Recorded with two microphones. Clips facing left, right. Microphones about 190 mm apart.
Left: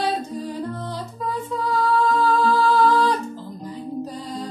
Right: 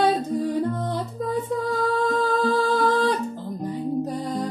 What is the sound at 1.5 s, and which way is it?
Music, 55° right (ahead or behind).